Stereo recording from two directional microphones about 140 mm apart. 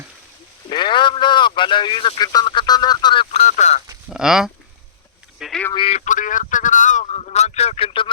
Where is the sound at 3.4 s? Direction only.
60° left (ahead or behind).